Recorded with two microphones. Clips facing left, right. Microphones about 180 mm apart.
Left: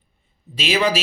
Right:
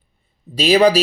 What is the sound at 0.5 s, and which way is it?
Speech, 35° right (ahead or behind).